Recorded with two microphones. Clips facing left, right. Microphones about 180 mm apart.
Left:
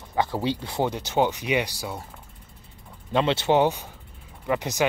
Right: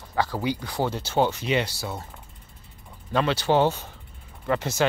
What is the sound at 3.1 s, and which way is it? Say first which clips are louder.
Speech: left 1 dB; 25° left (ahead or behind).